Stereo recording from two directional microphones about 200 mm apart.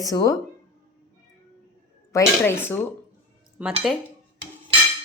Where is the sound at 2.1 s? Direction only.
10° left (ahead or behind).